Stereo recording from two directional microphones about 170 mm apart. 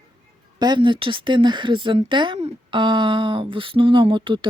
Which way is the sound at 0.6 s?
25° right (ahead or behind).